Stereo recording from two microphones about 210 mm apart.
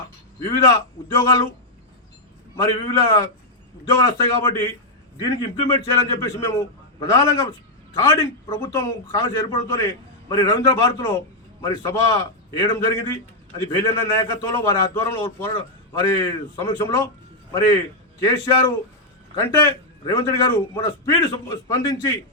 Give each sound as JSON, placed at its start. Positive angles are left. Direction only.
{"t": 1.0, "sound": "a man's voice", "side_deg": 15}
{"t": 2.6, "sound": "a man's voice", "side_deg": 15}
{"t": 18.2, "sound": "a man's voice", "side_deg": 15}